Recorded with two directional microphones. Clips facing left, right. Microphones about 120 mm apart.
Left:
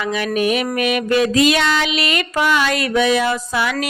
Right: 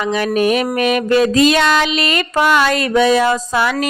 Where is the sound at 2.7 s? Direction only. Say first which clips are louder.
Right 3 dB; 35° right (ahead or behind).